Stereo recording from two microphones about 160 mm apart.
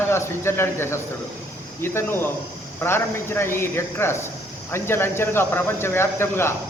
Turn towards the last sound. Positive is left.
turn(degrees=15)  # may be behind; listen again after turning